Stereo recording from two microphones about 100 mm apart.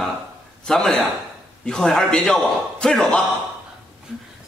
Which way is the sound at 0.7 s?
10° left (ahead or behind).